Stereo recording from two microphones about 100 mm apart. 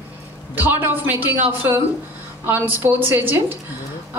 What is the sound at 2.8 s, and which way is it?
Speech, 20° right (ahead or behind).